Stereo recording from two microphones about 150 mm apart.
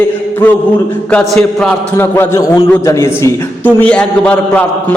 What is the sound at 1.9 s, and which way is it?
A man's voice, 15° left (ahead or behind).